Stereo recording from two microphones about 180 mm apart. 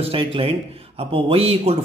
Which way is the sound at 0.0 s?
30° right (ahead or behind).